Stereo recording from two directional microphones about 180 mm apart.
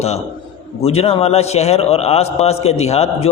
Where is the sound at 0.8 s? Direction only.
35° left (ahead or behind).